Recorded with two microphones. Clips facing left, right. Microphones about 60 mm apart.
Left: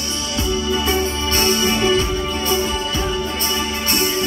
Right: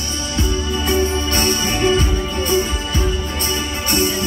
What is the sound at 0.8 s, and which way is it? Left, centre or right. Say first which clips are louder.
Music: right 2 dB; right.